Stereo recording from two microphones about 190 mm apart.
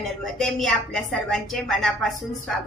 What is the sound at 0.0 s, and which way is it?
A woman's voice, centre (ahead or behind).